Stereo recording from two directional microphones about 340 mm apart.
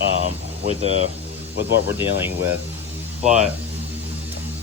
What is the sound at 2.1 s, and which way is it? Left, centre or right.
Speech, centre.